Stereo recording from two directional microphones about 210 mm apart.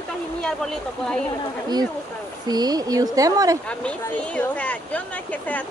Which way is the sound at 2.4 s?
20° right (ahead or behind).